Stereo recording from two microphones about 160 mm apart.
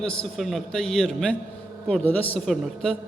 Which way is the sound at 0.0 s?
5° left (ahead or behind).